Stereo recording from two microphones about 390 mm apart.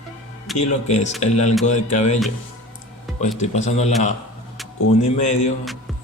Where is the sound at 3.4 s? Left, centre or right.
Centre.